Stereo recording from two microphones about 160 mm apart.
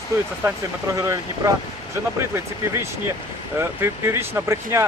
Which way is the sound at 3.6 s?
15° right (ahead or behind).